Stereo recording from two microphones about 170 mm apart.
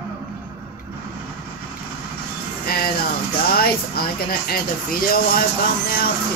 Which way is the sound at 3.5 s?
65° left (ahead or behind).